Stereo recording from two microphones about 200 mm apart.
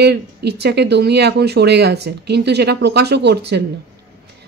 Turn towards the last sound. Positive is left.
turn(degrees=-60)  # may be behind; listen again after turning